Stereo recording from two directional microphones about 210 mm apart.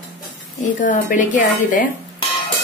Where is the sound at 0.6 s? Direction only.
35° left (ahead or behind).